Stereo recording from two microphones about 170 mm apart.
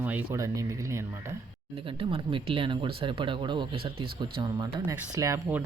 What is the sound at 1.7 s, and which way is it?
Speech, 30° right (ahead or behind).